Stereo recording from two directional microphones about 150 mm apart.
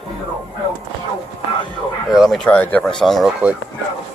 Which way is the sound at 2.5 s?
10° left (ahead or behind).